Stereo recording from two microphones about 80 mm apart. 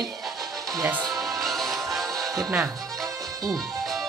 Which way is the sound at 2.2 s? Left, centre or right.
Right.